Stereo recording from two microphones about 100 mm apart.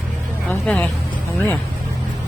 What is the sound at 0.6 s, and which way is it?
Speech, 15° left (ahead or behind).